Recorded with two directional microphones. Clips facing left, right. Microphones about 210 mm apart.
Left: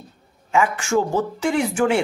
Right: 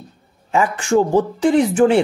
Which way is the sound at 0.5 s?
35° right (ahead or behind).